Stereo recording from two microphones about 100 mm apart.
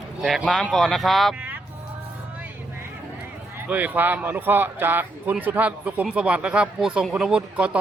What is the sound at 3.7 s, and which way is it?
Speech, 15° right (ahead or behind).